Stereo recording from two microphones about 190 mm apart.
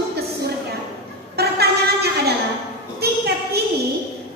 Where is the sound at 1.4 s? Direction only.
55° right (ahead or behind).